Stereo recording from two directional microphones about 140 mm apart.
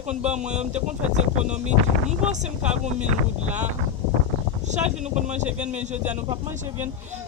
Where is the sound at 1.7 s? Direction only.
55° right (ahead or behind).